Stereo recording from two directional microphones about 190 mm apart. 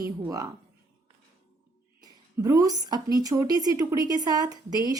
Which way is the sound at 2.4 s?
20° right (ahead or behind).